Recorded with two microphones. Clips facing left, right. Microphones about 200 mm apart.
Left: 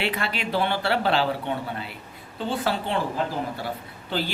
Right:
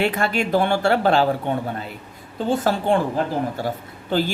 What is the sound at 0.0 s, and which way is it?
Speech, 45° right (ahead or behind).